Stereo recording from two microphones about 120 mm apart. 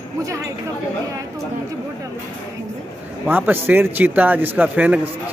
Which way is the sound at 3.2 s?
15° right (ahead or behind).